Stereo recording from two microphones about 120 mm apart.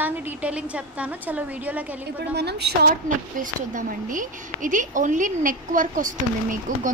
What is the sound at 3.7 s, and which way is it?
A woman's voice, 90° right.